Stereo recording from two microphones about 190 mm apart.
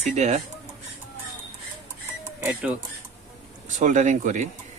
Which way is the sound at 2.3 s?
5° right (ahead or behind).